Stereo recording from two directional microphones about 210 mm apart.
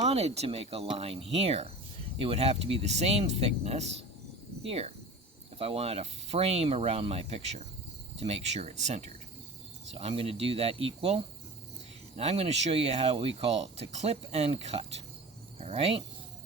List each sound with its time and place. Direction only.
0.0 s speech: 30° right (ahead or behind)